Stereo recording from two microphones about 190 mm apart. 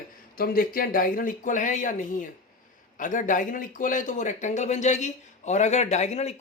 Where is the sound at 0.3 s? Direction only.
50° left (ahead or behind).